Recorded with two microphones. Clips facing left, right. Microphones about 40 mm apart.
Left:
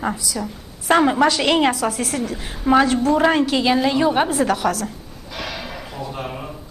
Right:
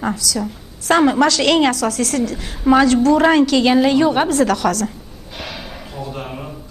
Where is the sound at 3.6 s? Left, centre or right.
Centre.